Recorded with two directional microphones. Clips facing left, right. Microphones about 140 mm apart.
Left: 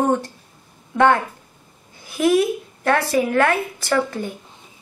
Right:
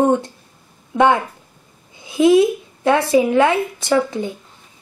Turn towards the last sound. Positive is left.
turn(degrees=-20)  # may be behind; listen again after turning